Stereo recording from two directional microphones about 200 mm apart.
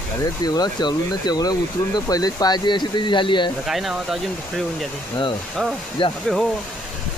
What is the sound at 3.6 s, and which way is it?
Speech, centre (ahead or behind).